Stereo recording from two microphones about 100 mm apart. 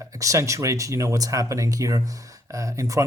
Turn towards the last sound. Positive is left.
turn(degrees=-30)  # may be behind; listen again after turning